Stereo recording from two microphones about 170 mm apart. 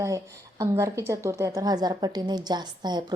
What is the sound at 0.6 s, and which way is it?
A woman's voice, 20° right (ahead or behind).